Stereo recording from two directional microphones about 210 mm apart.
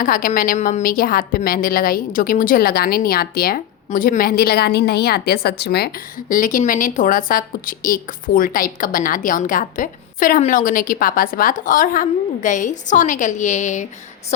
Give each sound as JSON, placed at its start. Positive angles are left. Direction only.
{"t": 0.0, "sound": "a woman's voice", "side_deg": 40}